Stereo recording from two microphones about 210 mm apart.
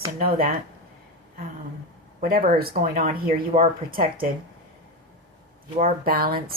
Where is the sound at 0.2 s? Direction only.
45° right (ahead or behind).